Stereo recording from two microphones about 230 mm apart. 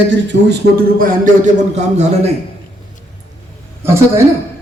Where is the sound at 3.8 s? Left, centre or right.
Centre.